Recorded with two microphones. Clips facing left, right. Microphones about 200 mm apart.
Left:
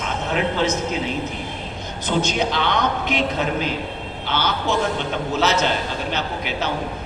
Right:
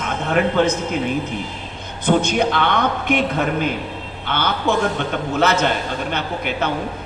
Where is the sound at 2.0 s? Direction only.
55° right (ahead or behind).